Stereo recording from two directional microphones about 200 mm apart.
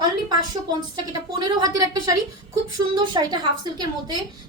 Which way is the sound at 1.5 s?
20° right (ahead or behind).